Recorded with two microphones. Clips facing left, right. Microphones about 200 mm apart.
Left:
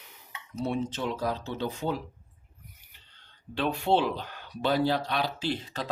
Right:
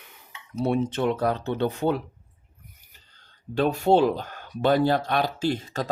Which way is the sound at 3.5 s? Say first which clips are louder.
Right 6 dB; 45° right (ahead or behind).